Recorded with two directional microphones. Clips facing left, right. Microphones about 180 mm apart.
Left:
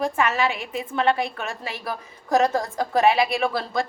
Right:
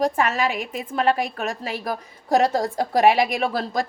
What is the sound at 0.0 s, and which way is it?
A woman's voice, 40° right (ahead or behind).